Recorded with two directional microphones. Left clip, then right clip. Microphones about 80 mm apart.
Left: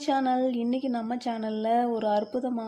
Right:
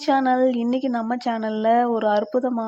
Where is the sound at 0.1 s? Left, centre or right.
Right.